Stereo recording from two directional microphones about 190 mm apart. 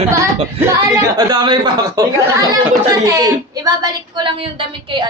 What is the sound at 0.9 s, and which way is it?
Speech, 20° right (ahead or behind).